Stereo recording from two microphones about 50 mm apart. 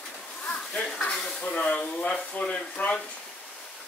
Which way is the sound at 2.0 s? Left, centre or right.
Left.